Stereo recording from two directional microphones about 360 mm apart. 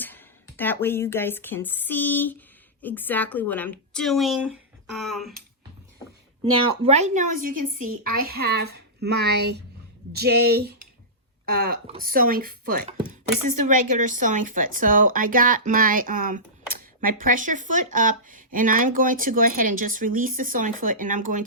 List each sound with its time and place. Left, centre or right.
0.0 s a woman's voice: centre
6.8 s speech: centre
13.4 s speech: right
14.2 s speech: right